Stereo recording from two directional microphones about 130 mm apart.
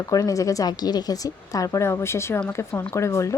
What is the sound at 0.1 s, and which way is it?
Speech, 25° left (ahead or behind).